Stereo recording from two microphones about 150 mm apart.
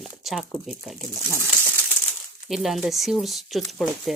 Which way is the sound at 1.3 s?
20° right (ahead or behind).